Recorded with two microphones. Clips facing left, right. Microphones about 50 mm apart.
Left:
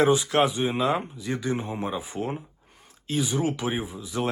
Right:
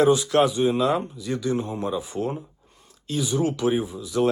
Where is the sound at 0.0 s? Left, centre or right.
Left.